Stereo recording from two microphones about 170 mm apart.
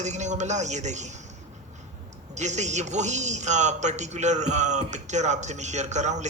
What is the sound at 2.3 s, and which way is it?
A man's voice, 45° right (ahead or behind).